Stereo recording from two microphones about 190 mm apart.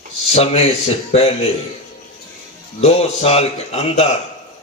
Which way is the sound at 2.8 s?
35° left (ahead or behind).